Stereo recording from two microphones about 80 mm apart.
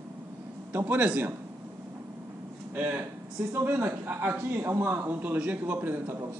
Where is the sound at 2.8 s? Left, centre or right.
Right.